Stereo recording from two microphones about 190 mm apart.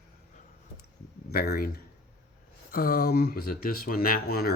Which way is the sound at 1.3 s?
55° left (ahead or behind).